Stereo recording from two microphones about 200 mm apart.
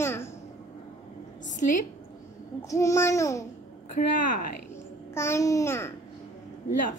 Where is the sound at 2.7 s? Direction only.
15° left (ahead or behind).